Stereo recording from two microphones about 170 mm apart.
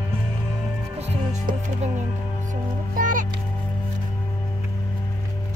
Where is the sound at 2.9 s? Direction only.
50° right (ahead or behind).